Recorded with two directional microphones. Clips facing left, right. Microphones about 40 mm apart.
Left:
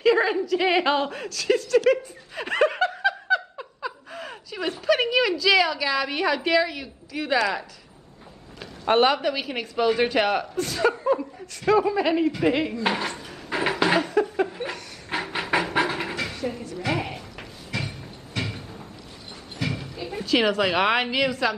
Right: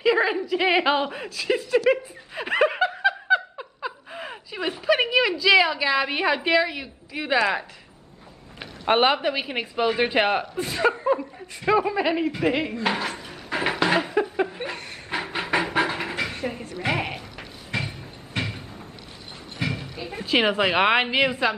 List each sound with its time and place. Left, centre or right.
0.0 s speech: centre
7.3 s a woman's voice: right; by 12.3 s centre
12.4 s dishes: centre
12.8 s speech: centre
14.2 s a sound: centre
15.0 s train: centre
16.4 s speech: right
17.0 s sheep: right
17.7 s train: right
19.6 s clip-clop: centre
20.0 s a woman's voice: centre